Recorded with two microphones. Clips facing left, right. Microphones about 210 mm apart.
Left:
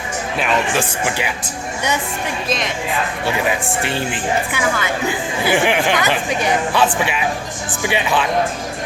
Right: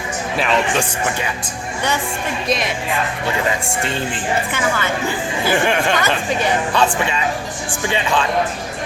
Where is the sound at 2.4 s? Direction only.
Centre (ahead or behind).